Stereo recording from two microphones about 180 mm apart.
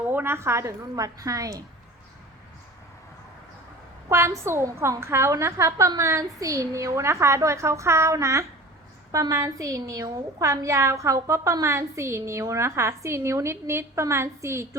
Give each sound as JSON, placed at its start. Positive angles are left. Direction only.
{"t": 0.0, "sound": "a woman's voice", "side_deg": -10}
{"t": 4.1, "sound": "a woman's voice", "side_deg": -15}